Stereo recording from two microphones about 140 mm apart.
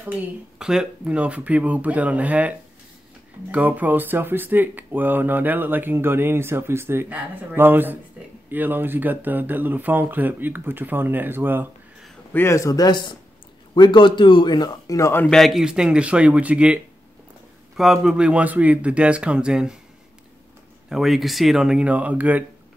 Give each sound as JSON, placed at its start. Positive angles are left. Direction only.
{"t": 0.0, "sound": "speech", "side_deg": -5}
{"t": 3.5, "sound": "speech", "side_deg": -10}
{"t": 12.3, "sound": "a man's voice", "side_deg": 15}
{"t": 15.2, "sound": "speech", "side_deg": 0}
{"t": 20.9, "sound": "speech", "side_deg": 0}